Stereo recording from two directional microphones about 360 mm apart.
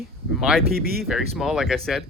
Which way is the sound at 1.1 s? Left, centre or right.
Centre.